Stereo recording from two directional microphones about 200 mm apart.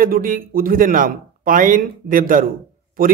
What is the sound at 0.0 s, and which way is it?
A man's voice, 45° right (ahead or behind).